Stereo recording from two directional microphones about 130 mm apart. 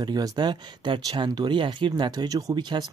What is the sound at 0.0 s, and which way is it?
Speech, 30° right (ahead or behind).